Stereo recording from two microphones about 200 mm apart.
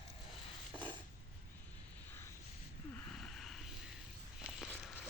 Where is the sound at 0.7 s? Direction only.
25° right (ahead or behind).